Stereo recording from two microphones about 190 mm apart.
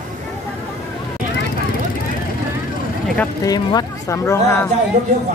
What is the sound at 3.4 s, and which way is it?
Speech, 20° left (ahead or behind).